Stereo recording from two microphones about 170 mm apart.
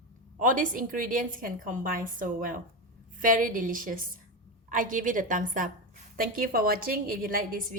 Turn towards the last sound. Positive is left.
turn(degrees=-55)  # may be behind; listen again after turning